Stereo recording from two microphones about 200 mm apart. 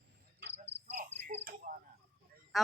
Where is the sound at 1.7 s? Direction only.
45° right (ahead or behind).